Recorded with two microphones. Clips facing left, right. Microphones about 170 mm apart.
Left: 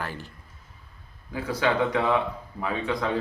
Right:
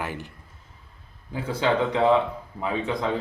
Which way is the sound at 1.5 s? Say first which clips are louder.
Right 1 dB; 25° right (ahead or behind).